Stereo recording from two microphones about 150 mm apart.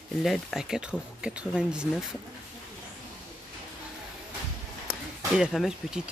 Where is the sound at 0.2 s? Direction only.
Centre (ahead or behind).